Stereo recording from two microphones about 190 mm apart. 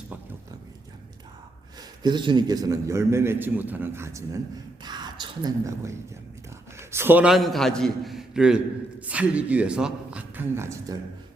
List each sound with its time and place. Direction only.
2.0 s a man's voice: 25° right (ahead or behind)